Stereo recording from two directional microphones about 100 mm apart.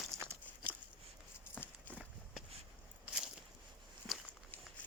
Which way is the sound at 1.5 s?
15° left (ahead or behind).